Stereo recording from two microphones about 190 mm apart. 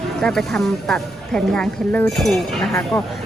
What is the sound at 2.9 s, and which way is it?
Speech, 15° left (ahead or behind).